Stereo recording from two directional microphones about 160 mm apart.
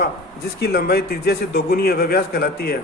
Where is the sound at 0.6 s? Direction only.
75° left (ahead or behind).